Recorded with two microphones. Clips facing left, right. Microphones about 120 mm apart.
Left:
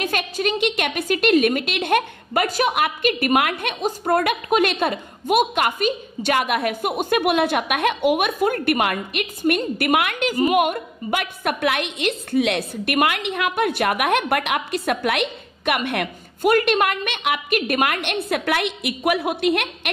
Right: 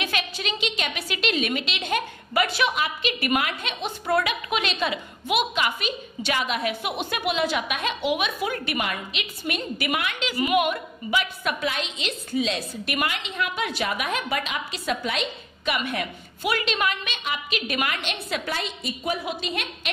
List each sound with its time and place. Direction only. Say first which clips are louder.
0.0 s a woman's voice: left 6 dB; 50° left (ahead or behind)
2.7 s a woman's voice: left 6 dB; 55° left (ahead or behind)